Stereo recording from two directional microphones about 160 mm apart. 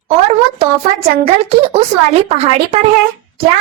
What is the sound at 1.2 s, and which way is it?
A woman's voice, 40° right (ahead or behind).